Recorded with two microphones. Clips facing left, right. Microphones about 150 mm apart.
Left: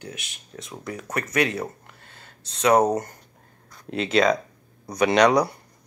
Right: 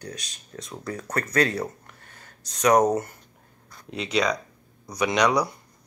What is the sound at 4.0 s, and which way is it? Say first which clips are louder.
Speech: left 5 dB; 50° left (ahead or behind).